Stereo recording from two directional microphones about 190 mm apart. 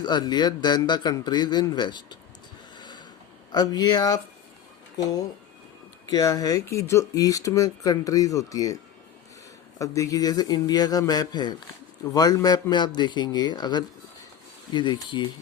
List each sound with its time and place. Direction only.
0.0 s speech: 20° left (ahead or behind)
2.7 s a sound: 25° left (ahead or behind)
3.5 s speech: 20° left (ahead or behind)
6.1 s speech: 20° left (ahead or behind)